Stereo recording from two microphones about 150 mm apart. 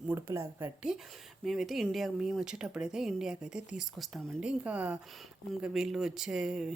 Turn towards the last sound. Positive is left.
turn(degrees=-5)  # may be behind; listen again after turning